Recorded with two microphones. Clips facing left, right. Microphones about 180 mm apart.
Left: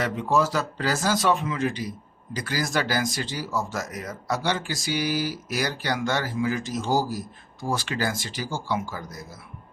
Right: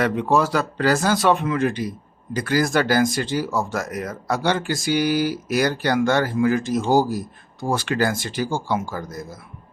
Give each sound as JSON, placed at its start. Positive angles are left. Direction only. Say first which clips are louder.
{"t": 0.0, "sound": "speech", "louder": "right 4 dB", "side_deg": -65}